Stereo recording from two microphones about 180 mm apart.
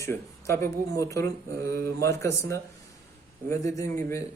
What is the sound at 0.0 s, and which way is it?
Speech, 15° left (ahead or behind).